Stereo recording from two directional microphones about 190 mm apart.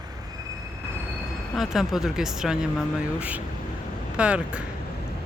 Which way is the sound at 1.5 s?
Centre (ahead or behind).